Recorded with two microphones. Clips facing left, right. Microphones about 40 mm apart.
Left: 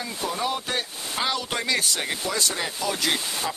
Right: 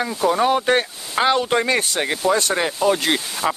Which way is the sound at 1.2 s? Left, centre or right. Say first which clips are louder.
Right 10 dB; right.